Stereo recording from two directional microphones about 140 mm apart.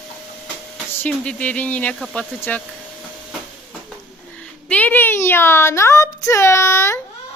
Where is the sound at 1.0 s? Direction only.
10° left (ahead or behind).